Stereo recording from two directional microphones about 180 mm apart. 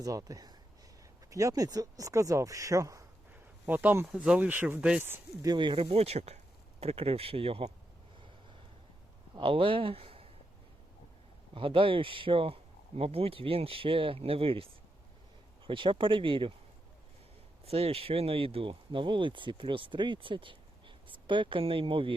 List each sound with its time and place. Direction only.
0.0 s speech: 20° right (ahead or behind)
9.3 s speech: 30° right (ahead or behind)
11.5 s speech: 30° right (ahead or behind)
17.7 s speech: 35° right (ahead or behind)